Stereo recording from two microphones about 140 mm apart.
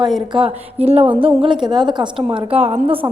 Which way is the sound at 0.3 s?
45° right (ahead or behind).